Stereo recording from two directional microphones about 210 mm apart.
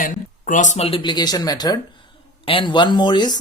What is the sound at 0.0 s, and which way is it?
Speech, 40° left (ahead or behind).